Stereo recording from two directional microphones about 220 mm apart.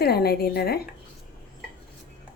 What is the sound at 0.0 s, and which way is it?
Speech, 45° left (ahead or behind).